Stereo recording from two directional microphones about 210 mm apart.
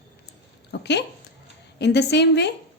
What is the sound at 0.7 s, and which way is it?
A woman's voice, 55° left (ahead or behind).